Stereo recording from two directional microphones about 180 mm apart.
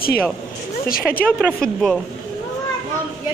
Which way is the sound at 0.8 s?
50° left (ahead or behind).